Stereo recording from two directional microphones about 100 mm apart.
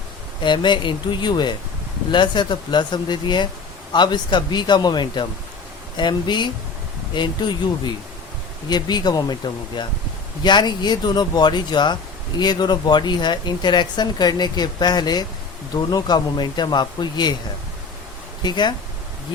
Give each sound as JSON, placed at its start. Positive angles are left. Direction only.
{"t": 0.4, "sound": "speech", "side_deg": 50}
{"t": 8.7, "sound": "speech", "side_deg": 45}
{"t": 18.4, "sound": "speech", "side_deg": 45}